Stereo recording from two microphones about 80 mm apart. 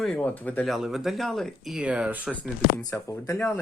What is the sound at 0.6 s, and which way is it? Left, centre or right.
Speech, centre.